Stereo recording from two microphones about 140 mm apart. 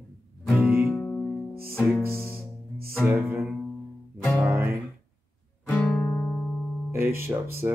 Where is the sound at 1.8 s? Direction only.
15° right (ahead or behind).